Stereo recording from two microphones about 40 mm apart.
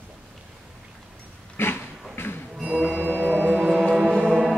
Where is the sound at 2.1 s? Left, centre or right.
Left.